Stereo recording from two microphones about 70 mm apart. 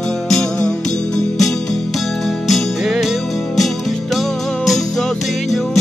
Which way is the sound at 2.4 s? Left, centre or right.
Centre.